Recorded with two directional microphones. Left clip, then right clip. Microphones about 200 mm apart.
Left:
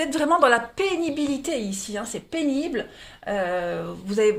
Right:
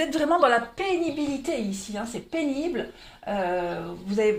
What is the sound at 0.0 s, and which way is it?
A woman's voice, 25° left (ahead or behind).